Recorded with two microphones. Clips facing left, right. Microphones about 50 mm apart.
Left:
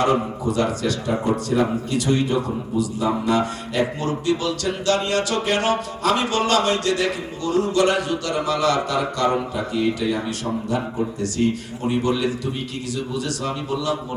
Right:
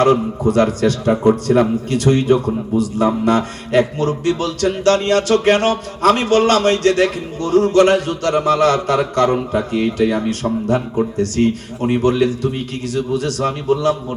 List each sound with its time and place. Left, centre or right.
0.0 s a man's voice: right